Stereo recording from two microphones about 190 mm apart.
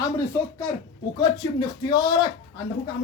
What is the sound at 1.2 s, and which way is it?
Speech, 20° left (ahead or behind).